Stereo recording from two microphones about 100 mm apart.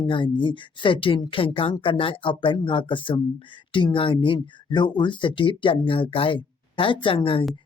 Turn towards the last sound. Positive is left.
turn(degrees=65)  # may be behind; listen again after turning